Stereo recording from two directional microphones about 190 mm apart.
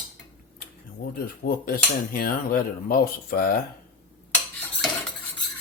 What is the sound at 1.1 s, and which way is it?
Cutlery, 50° left (ahead or behind).